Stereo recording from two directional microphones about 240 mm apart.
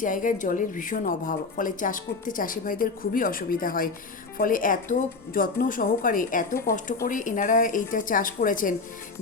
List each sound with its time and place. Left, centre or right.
0.0 s speech: left